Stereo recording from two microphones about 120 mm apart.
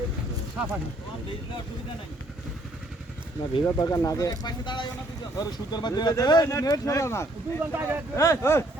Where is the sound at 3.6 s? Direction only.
25° left (ahead or behind).